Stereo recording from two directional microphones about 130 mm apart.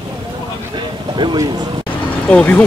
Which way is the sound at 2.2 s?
10° left (ahead or behind).